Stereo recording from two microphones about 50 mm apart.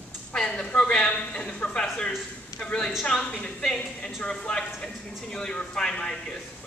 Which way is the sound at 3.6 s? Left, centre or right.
Centre.